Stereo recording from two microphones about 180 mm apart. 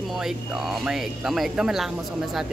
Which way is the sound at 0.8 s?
Centre (ahead or behind).